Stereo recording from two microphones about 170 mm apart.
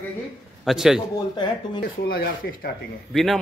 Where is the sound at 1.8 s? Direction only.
70° left (ahead or behind).